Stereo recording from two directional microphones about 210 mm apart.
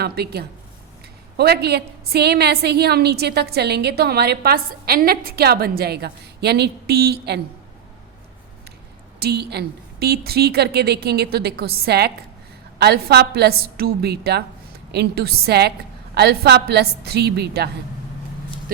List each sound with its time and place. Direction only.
0.0 s a woman's voice: 50° right (ahead or behind)
9.1 s a woman's voice: 50° right (ahead or behind)